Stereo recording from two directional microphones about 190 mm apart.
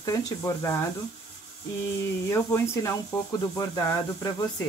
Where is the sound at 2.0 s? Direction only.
15° left (ahead or behind).